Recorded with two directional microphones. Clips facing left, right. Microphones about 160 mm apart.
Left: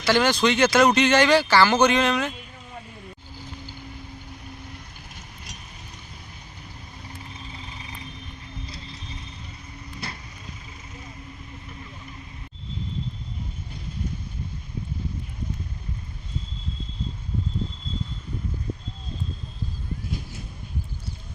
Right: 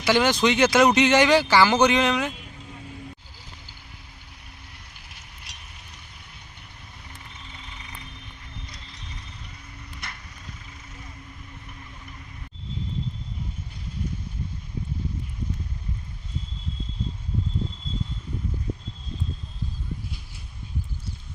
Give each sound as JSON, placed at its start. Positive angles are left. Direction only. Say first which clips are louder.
{"t": 0.0, "sound": "speech", "louder": "even", "side_deg": -15}
{"t": 7.3, "sound": "vehicle", "louder": "left 4 dB", "side_deg": 30}
{"t": 8.6, "sound": "clip-clop", "louder": "left 5 dB", "side_deg": 30}
{"t": 20.1, "sound": "a sound", "louder": "left 8 dB", "side_deg": 45}